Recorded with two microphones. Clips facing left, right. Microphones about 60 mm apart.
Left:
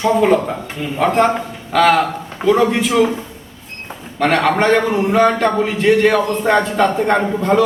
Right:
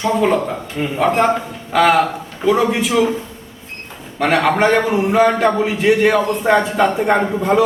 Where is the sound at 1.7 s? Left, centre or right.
Centre.